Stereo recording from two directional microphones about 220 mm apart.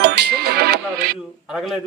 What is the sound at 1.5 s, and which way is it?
Speech, 5° right (ahead or behind).